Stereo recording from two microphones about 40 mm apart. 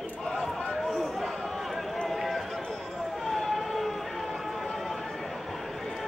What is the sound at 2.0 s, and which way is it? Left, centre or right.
Run, centre.